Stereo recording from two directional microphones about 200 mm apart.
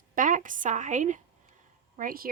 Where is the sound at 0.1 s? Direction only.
40° right (ahead or behind).